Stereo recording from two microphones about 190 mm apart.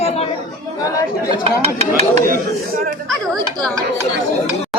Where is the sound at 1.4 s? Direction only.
35° right (ahead or behind).